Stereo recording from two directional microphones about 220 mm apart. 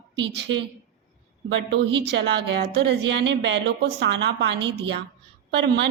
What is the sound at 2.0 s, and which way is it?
A woman's voice, 50° right (ahead or behind).